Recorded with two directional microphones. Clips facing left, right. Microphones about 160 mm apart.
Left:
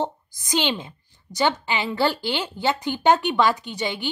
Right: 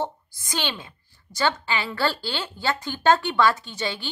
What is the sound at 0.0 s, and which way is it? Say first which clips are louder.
A woman's voice: left 2 dB; 15° left (ahead or behind).